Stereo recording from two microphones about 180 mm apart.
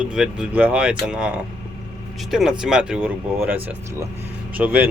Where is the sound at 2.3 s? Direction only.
Centre (ahead or behind).